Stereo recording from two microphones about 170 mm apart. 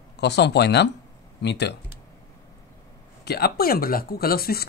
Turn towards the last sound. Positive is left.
turn(degrees=65)  # may be behind; listen again after turning